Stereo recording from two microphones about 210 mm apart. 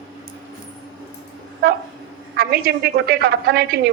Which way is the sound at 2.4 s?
50° right (ahead or behind).